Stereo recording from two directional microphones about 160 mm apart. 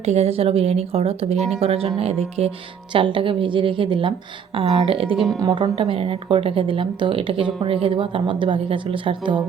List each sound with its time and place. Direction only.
0.0 s speech: 40° right (ahead or behind)
5.1 s speech: centre (ahead or behind)
5.4 s a woman's voice: 25° right (ahead or behind)
5.7 s speech: 35° right (ahead or behind)